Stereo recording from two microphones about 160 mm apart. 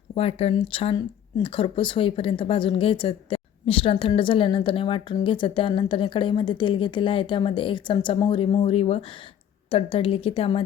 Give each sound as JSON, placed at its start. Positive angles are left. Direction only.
{"t": 0.1, "sound": "speech", "side_deg": 40}